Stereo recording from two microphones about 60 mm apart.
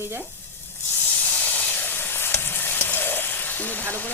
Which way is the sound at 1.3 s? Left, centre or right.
Left.